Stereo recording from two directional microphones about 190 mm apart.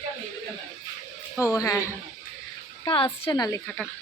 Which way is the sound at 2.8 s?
25° left (ahead or behind).